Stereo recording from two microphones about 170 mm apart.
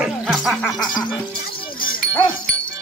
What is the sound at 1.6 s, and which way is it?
Music, 30° left (ahead or behind).